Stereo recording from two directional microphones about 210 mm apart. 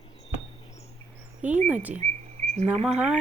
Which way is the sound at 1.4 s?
5° right (ahead or behind).